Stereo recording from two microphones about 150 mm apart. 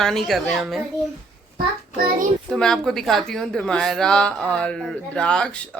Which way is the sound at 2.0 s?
65° right (ahead or behind).